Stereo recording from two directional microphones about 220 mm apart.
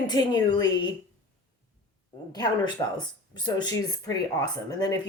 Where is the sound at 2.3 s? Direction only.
20° left (ahead or behind).